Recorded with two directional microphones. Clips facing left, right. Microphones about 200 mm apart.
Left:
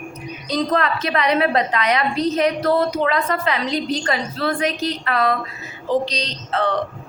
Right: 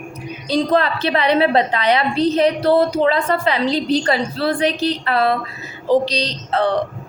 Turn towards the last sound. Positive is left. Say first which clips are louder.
# right 3 dB
turn(degrees=-35)  # may be behind; listen again after turning